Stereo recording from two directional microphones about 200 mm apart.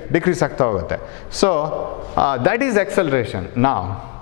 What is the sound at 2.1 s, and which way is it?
A man's voice, 15° left (ahead or behind).